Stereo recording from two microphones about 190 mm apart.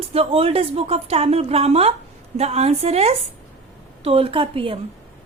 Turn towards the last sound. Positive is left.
turn(degrees=-30)  # may be behind; listen again after turning